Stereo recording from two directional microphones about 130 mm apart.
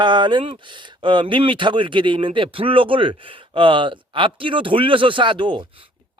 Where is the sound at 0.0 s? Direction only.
35° right (ahead or behind).